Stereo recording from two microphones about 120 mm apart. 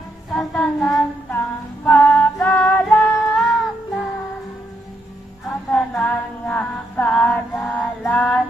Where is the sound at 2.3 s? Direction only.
15° left (ahead or behind).